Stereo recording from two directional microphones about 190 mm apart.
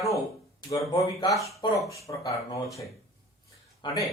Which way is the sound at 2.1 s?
15° left (ahead or behind).